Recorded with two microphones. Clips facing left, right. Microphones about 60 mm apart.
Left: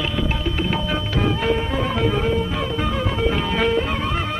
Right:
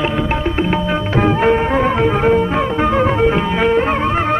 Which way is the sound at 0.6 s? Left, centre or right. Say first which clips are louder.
Right 5 dB; right.